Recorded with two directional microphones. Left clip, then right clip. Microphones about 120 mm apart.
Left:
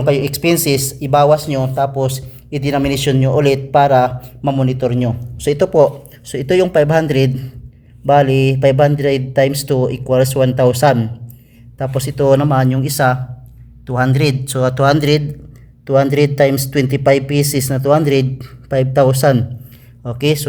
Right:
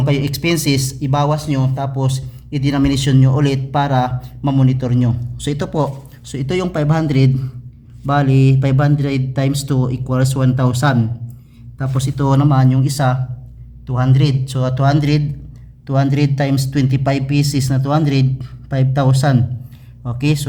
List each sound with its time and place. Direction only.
0.0 s speech: 20° left (ahead or behind)
13.8 s a man's voice: 45° left (ahead or behind)
15.9 s speech: 30° left (ahead or behind)